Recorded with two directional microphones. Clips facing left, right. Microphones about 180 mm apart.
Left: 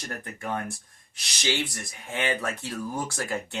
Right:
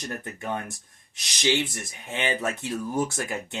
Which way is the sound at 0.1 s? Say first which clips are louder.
Even; 20° right (ahead or behind).